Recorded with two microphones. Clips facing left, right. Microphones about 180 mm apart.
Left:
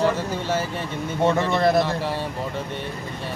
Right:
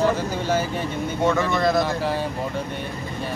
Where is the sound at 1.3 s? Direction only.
30° left (ahead or behind).